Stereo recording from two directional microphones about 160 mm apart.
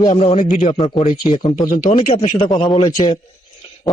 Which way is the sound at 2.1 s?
40° left (ahead or behind).